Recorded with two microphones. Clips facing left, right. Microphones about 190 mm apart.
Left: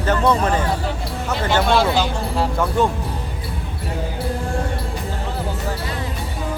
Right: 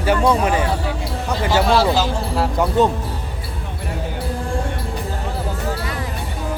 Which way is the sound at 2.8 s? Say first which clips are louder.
Right 3 dB; 20° right (ahead or behind).